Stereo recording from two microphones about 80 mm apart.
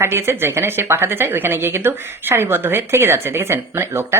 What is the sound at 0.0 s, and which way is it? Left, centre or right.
Speech, right.